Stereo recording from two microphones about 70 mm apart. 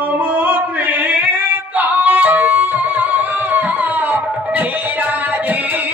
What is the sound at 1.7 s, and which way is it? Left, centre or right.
Music, right.